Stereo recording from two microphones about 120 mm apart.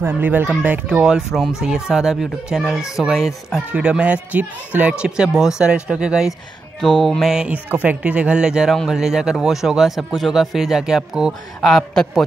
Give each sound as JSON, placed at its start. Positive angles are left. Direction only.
{"t": 0.0, "sound": "speech", "side_deg": -15}